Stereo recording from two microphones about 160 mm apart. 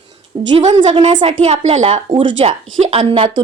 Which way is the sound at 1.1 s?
35° right (ahead or behind).